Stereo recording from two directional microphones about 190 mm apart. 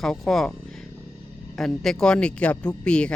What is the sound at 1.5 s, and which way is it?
Speech, centre (ahead or behind).